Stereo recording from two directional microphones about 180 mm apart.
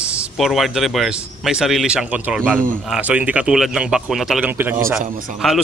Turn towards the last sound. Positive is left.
turn(degrees=0)  # may be behind; listen again after turning